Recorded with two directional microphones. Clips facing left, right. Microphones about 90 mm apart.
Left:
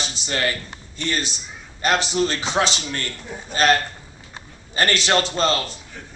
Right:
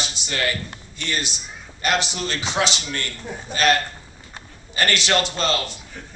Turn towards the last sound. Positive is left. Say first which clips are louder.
# left 2 dB
turn(degrees=35)  # may be behind; listen again after turning